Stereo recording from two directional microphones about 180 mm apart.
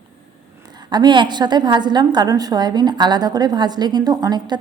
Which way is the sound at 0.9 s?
25° right (ahead or behind).